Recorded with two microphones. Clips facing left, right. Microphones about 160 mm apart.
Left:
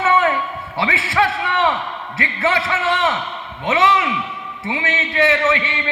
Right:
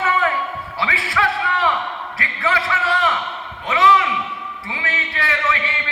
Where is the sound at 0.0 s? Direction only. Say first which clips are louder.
Left 3 dB; 25° left (ahead or behind).